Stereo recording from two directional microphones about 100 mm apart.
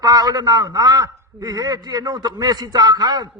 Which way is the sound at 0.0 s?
40° right (ahead or behind).